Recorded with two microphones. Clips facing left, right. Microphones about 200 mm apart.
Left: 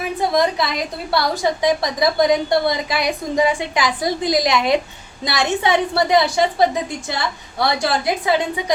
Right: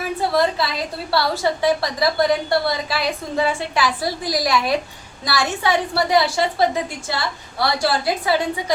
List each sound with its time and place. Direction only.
0.2 s a woman's voice: 15° left (ahead or behind)